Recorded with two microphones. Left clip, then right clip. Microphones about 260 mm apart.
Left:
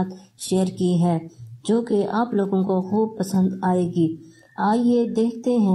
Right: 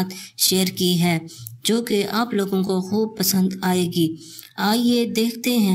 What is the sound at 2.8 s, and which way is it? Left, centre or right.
Speech, right.